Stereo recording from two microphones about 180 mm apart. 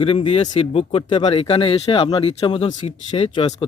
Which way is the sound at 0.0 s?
30° left (ahead or behind).